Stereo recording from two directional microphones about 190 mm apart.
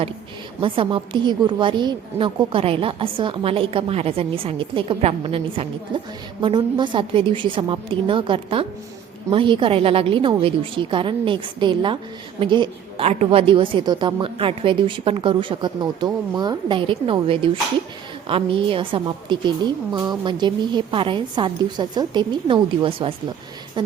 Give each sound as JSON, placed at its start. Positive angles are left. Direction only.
{"t": 0.6, "sound": "a woman's voice", "side_deg": -25}